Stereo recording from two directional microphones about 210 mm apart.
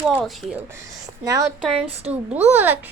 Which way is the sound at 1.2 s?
15° right (ahead or behind).